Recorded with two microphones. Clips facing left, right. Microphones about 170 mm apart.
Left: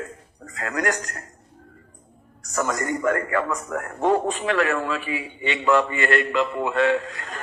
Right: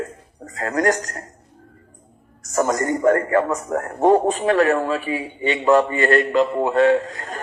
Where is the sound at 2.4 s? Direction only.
40° right (ahead or behind).